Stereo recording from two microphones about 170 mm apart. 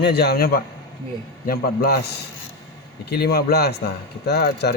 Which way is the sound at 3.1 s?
70° left (ahead or behind).